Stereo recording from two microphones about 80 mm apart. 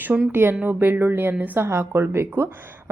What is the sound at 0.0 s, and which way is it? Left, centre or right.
A woman's voice, right.